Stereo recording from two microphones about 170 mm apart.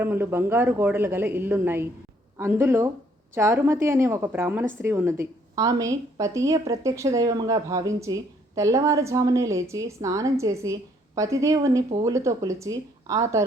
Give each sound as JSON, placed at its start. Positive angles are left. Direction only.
{"t": 0.0, "sound": "a woman's voice", "side_deg": -15}